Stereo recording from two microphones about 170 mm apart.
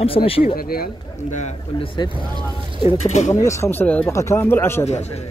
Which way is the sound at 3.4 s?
15° left (ahead or behind).